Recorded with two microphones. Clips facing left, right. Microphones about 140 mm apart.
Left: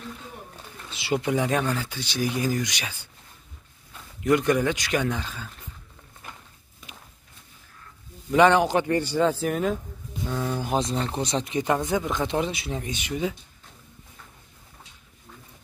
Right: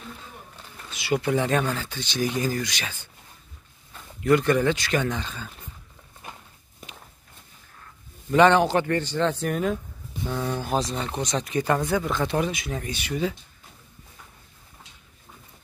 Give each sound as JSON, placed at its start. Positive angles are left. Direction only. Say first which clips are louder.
{"t": 0.8, "sound": "speech", "louder": "right 1 dB", "side_deg": 25}
{"t": 1.3, "sound": "speech", "louder": "even", "side_deg": 10}
{"t": 4.2, "sound": "speech", "louder": "right 1 dB", "side_deg": 15}
{"t": 6.2, "sound": "walk", "louder": "right 2 dB", "side_deg": -20}
{"t": 8.3, "sound": "speech", "louder": "right 1 dB", "side_deg": 10}
{"t": 11.1, "sound": "speech", "louder": "even", "side_deg": 25}